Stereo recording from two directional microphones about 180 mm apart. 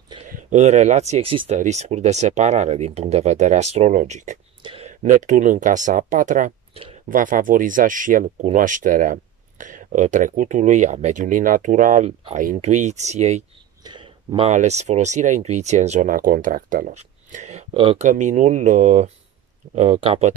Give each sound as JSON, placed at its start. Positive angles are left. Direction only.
{"t": 0.3, "sound": "speech", "side_deg": -40}
{"t": 6.7, "sound": "a sound", "side_deg": -35}
{"t": 7.1, "sound": "speech", "side_deg": -50}
{"t": 13.8, "sound": "speech", "side_deg": -25}
{"t": 17.7, "sound": "speech", "side_deg": -30}
{"t": 18.0, "sound": "speech", "side_deg": -45}